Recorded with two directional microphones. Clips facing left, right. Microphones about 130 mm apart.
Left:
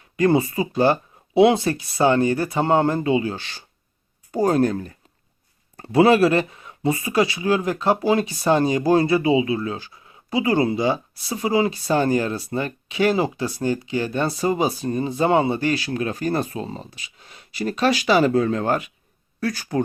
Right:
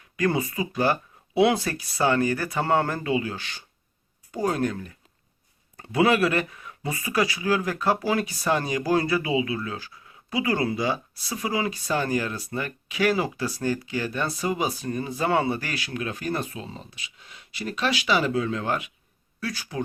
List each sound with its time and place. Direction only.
0.2 s speech: 30° left (ahead or behind); by 19.8 s 45° left (ahead or behind)